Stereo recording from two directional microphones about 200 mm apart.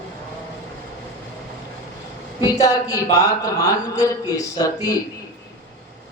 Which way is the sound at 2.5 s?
20° left (ahead or behind).